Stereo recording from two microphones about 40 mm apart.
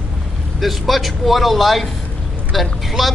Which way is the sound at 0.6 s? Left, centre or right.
Centre.